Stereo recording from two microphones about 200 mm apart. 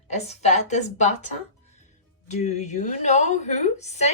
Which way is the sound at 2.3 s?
35° left (ahead or behind).